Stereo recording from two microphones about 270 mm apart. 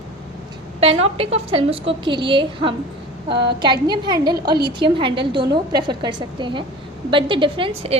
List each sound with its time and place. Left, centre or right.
0.8 s a woman's voice: right